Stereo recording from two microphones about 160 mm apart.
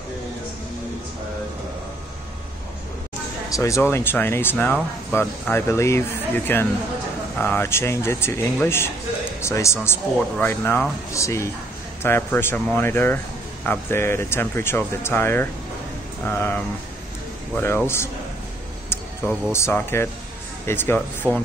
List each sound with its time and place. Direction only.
3.5 s speech: 20° left (ahead or behind)
17.8 s speech: 15° left (ahead or behind)
19.5 s speech: 15° left (ahead or behind)
21.2 s speech: 20° right (ahead or behind)